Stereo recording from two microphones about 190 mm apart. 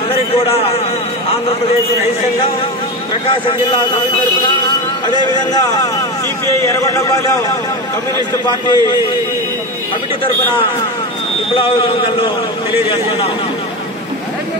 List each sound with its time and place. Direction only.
0.1 s a man's voice: 30° left (ahead or behind)
3.3 s a man's voice: 25° left (ahead or behind)
8.5 s speech: 25° left (ahead or behind)
11.5 s speech: 25° left (ahead or behind)